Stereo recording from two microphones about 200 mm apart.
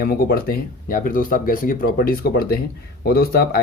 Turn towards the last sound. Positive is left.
turn(degrees=50)  # may be behind; listen again after turning